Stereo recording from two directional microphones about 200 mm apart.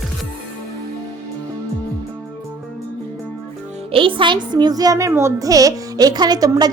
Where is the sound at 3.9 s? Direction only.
25° right (ahead or behind).